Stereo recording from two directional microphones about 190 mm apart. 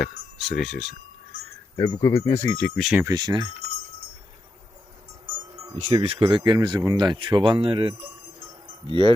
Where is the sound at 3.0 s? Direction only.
20° right (ahead or behind).